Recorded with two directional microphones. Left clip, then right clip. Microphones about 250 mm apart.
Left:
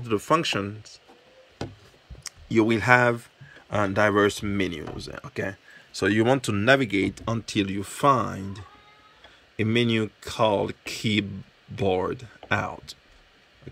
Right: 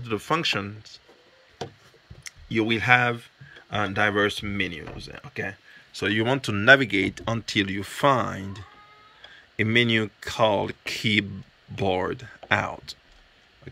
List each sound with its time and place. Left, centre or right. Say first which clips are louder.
0.0 s speech: left 2 dB; centre
2.2 s speech: left 3 dB; left; by 12.9 s centre